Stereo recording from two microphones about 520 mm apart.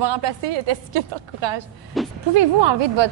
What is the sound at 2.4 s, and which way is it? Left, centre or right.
Speech, right.